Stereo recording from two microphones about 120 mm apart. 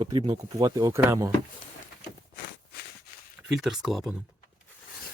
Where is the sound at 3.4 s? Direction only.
5° right (ahead or behind).